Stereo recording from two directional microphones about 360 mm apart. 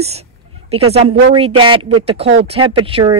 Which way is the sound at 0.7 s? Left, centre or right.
Centre.